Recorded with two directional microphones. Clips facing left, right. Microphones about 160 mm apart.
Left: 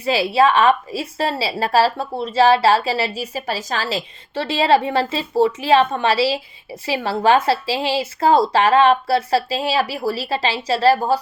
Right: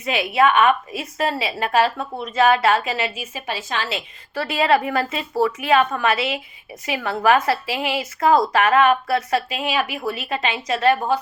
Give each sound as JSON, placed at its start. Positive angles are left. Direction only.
{"t": 0.0, "sound": "a woman's voice", "side_deg": 35}